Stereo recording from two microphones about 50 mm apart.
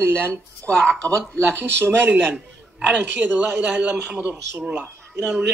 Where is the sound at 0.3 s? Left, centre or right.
Centre.